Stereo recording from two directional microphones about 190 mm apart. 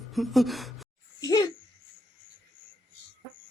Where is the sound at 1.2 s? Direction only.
15° left (ahead or behind).